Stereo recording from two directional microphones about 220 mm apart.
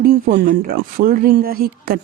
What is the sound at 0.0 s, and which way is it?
Speech, 40° right (ahead or behind).